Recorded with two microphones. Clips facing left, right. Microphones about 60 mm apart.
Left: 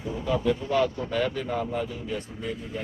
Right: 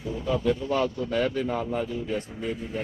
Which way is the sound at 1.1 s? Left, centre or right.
Right.